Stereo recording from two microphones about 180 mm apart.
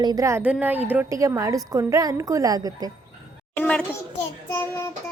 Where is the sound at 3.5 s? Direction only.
10° left (ahead or behind).